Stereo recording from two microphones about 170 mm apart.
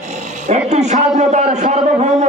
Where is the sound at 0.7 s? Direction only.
40° right (ahead or behind).